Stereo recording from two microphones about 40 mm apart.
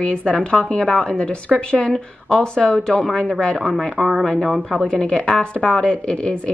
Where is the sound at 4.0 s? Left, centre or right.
Centre.